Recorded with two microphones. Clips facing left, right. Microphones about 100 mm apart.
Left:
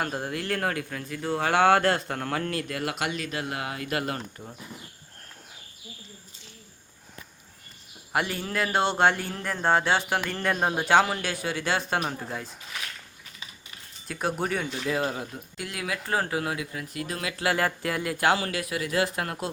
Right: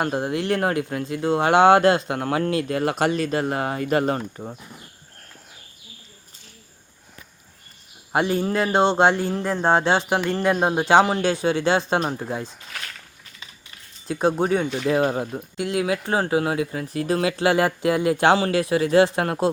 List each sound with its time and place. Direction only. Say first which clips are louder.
0.0 s speech: right 7 dB; 20° right (ahead or behind)
8.1 s speech: right 7 dB; 25° right (ahead or behind)
14.1 s speech: right 8 dB; 25° right (ahead or behind)